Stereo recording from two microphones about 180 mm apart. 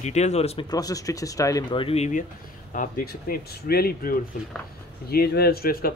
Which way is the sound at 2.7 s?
50° left (ahead or behind).